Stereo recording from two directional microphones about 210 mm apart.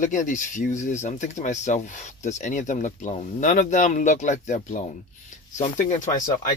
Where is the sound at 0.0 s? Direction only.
35° left (ahead or behind).